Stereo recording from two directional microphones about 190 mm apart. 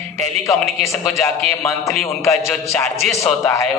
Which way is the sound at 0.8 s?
15° left (ahead or behind).